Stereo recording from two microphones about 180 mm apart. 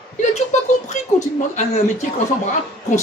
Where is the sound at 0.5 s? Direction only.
40° left (ahead or behind).